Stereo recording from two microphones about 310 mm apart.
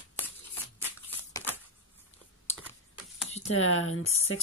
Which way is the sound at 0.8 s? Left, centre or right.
Centre.